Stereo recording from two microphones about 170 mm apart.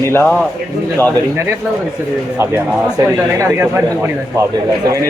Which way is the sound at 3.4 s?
15° right (ahead or behind).